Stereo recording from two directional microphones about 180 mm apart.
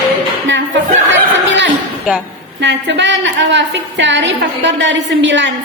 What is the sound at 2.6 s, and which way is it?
A woman's voice, 80° right.